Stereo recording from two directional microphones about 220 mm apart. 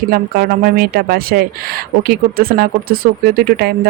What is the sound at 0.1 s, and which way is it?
Speech, 40° right (ahead or behind).